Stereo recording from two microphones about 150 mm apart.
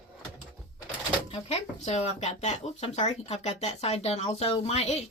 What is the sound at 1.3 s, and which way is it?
Speech, 45° left (ahead or behind).